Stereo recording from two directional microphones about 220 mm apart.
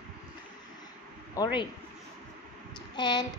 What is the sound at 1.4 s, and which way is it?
Speech, 15° left (ahead or behind).